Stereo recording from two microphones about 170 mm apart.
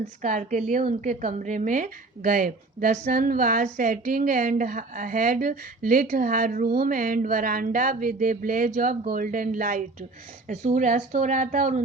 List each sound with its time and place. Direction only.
0.2 s a woman's voice: 45° right (ahead or behind)